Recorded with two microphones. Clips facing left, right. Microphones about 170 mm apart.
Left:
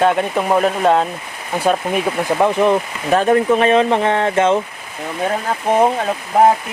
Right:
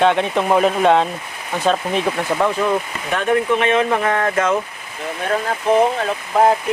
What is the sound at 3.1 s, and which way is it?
Speech, 35° left (ahead or behind).